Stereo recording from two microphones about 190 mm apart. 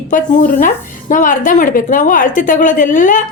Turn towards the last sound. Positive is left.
turn(degrees=45)  # may be behind; listen again after turning